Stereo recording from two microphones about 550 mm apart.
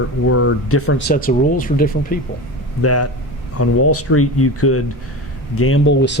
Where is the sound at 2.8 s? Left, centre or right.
Left.